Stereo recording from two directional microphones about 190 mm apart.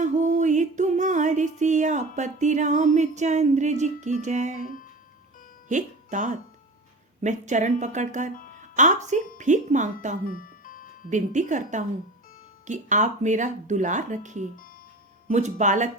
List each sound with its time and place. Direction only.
0.0 s music: 40° right (ahead or behind)
5.6 s speech: 40° right (ahead or behind)
10.3 s music: 45° left (ahead or behind)
11.1 s speech: 40° right (ahead or behind)